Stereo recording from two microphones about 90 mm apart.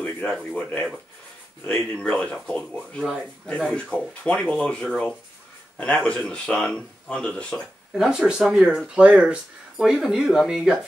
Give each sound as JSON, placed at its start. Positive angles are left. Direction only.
{"t": 0.0, "sound": "speech", "side_deg": 10}
{"t": 7.9, "sound": "speech", "side_deg": -5}